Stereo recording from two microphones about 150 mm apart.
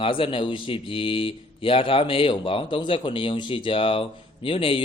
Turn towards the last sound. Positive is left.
turn(degrees=35)  # may be behind; listen again after turning